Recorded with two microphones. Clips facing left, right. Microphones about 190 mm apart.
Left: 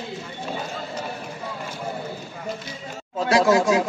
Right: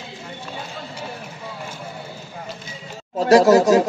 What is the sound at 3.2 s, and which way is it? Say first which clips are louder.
Speech: right 6 dB; 40° right (ahead or behind).